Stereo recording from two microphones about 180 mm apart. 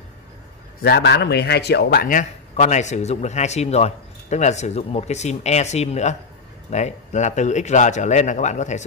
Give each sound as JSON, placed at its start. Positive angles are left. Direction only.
{"t": 0.8, "sound": "speech", "side_deg": 65}
{"t": 2.0, "sound": "speech", "side_deg": 45}